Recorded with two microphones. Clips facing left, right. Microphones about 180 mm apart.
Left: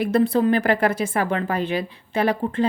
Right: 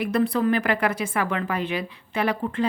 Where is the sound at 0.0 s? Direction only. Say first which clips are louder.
Left 3 dB; 30° left (ahead or behind).